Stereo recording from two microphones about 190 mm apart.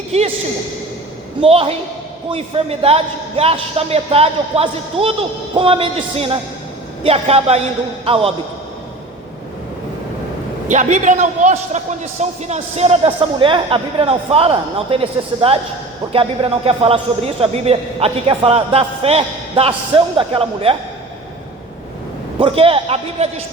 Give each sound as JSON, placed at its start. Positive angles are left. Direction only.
{"t": 0.1, "sound": "speech", "side_deg": -35}
{"t": 1.4, "sound": "a man's voice", "side_deg": -30}
{"t": 10.7, "sound": "a man's voice", "side_deg": -40}
{"t": 22.4, "sound": "speech", "side_deg": -30}